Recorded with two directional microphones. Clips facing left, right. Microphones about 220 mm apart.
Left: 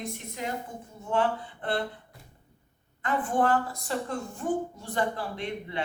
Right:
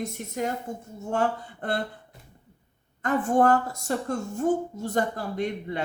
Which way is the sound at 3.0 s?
45° right (ahead or behind).